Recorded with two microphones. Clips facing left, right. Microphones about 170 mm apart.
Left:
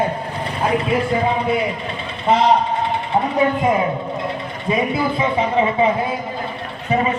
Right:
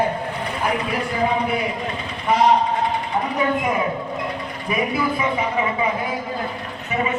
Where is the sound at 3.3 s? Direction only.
25° left (ahead or behind).